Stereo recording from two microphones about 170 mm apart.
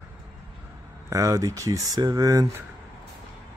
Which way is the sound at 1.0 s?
20° right (ahead or behind).